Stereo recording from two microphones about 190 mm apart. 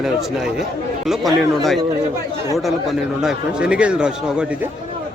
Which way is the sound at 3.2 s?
5° right (ahead or behind).